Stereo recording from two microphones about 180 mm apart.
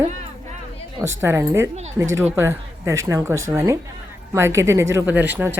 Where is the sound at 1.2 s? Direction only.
15° right (ahead or behind).